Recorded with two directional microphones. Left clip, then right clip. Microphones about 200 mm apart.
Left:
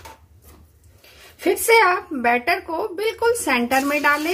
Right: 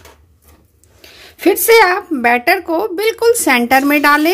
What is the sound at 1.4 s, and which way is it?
A woman's voice, 50° right (ahead or behind).